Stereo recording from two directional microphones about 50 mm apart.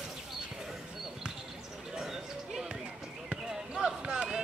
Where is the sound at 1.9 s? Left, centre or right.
Centre.